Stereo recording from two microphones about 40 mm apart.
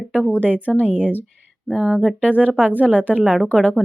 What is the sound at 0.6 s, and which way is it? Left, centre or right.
Speech, left.